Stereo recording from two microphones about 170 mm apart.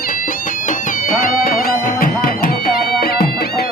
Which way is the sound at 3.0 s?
65° left (ahead or behind).